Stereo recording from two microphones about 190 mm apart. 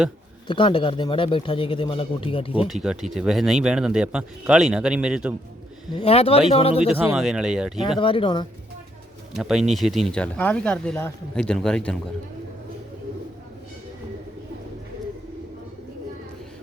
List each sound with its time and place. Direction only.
0.4 s speech: 25° left (ahead or behind)
2.6 s a man's voice: centre (ahead or behind)
6.0 s speech: 30° left (ahead or behind)
6.8 s a man's voice: 10° right (ahead or behind)
7.9 s speech: 25° left (ahead or behind)
9.3 s a man's voice: centre (ahead or behind)